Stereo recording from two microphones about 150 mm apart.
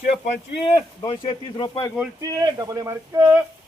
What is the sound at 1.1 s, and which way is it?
Speech, 35° left (ahead or behind).